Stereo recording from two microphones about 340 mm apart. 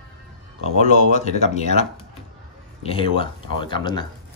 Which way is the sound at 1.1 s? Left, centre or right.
Centre.